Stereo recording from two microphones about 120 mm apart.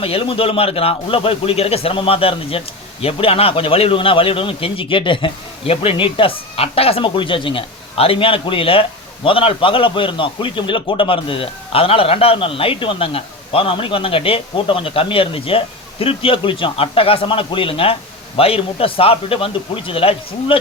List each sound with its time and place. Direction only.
0.0 s speech: 50° left (ahead or behind)